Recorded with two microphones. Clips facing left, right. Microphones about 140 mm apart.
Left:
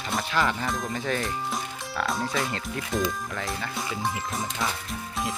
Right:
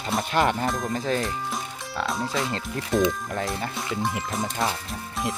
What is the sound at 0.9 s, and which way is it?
Speech, 30° right (ahead or behind).